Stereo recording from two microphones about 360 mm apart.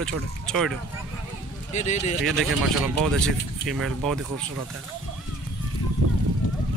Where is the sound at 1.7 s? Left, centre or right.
Centre.